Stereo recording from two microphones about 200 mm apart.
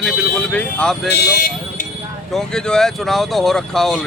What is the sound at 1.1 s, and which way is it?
Speech, 50° left (ahead or behind).